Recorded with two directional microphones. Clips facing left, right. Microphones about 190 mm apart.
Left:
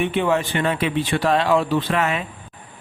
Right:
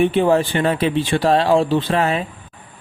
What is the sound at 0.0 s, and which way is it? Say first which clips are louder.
Speech: right 5 dB; 35° right (ahead or behind).